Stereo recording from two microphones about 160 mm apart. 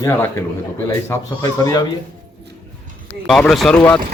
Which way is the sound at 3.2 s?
Centre (ahead or behind).